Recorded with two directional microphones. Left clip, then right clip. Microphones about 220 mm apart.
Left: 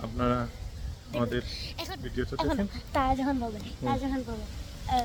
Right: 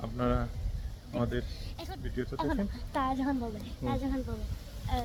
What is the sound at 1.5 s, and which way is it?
Speech, 40° left (ahead or behind).